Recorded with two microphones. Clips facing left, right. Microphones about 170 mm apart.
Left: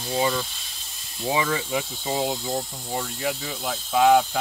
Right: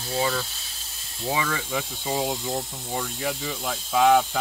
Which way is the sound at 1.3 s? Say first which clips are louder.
Left 3 dB; 15° left (ahead or behind).